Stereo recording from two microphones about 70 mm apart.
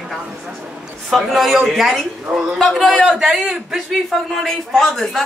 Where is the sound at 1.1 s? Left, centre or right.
Centre.